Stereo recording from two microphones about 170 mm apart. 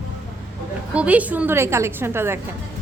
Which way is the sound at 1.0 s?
10° right (ahead or behind).